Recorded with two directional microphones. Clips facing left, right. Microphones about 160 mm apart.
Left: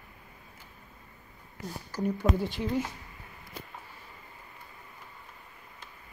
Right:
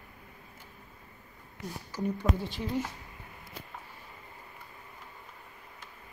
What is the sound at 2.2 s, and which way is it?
Speech, 20° left (ahead or behind).